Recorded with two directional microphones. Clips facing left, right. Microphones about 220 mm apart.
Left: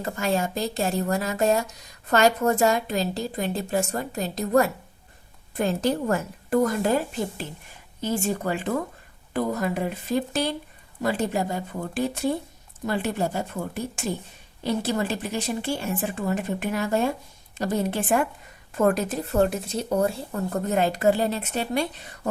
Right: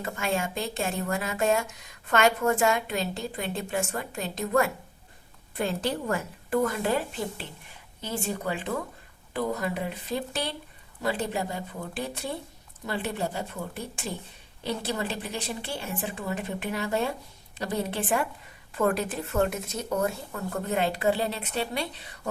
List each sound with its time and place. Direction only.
0.0 s speech: 40° left (ahead or behind)
9.3 s speech: 45° left (ahead or behind)